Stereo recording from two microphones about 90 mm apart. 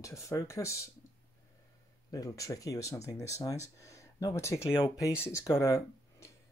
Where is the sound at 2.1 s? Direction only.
40° left (ahead or behind).